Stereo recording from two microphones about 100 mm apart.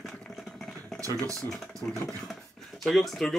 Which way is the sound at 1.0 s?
35° right (ahead or behind).